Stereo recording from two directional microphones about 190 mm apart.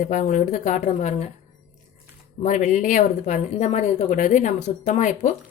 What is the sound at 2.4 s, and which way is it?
Speech, 40° left (ahead or behind).